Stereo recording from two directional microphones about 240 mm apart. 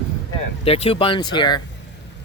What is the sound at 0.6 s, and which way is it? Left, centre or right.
Speech, left.